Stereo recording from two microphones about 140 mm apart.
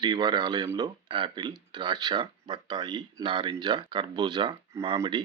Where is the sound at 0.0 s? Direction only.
30° right (ahead or behind).